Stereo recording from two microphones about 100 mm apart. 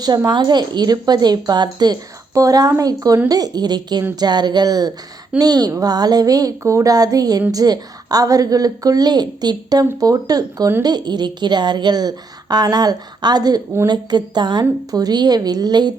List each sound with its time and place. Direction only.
0.3 s a woman's voice: 45° right (ahead or behind)